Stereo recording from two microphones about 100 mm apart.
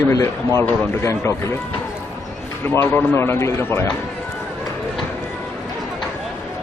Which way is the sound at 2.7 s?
15° left (ahead or behind).